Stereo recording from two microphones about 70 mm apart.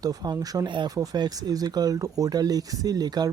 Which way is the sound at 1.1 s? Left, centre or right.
Right.